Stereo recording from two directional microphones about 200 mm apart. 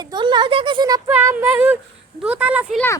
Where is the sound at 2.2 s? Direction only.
5° right (ahead or behind).